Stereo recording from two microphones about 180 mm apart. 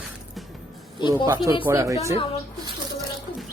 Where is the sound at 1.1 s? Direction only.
15° right (ahead or behind).